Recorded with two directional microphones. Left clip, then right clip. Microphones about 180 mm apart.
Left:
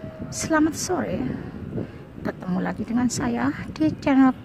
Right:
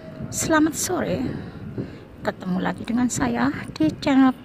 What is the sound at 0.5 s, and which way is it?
A woman's voice, 10° right (ahead or behind).